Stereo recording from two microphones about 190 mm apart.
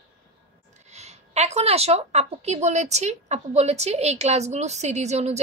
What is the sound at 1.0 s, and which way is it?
A woman's voice, 35° right (ahead or behind).